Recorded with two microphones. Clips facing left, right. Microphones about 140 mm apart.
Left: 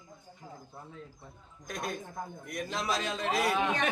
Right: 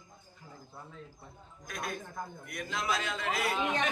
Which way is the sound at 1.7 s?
35° left (ahead or behind).